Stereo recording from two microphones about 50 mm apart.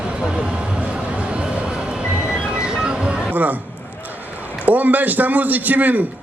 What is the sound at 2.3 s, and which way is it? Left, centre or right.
Music, centre.